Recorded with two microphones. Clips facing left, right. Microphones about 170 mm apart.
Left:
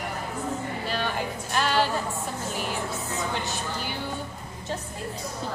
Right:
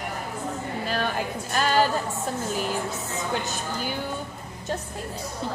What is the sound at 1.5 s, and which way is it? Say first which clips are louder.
Music: right 2 dB; 45° right (ahead or behind).